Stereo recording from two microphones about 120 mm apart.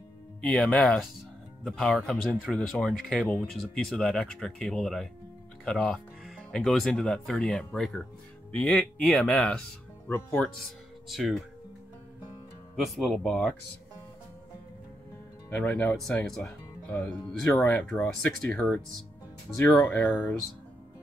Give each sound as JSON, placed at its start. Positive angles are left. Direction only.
{"t": 0.4, "sound": "speech", "side_deg": 10}
{"t": 11.1, "sound": "speech", "side_deg": 0}
{"t": 12.7, "sound": "speech", "side_deg": 0}
{"t": 15.5, "sound": "speech", "side_deg": 15}